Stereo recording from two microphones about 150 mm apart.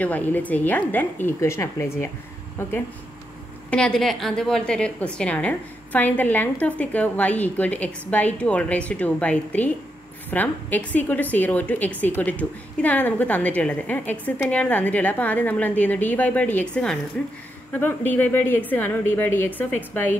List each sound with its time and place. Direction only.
0.0 s a woman's voice: 10° left (ahead or behind)
3.7 s a woman's voice: 5° left (ahead or behind)